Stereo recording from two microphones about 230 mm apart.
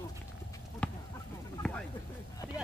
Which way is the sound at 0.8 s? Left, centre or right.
Centre.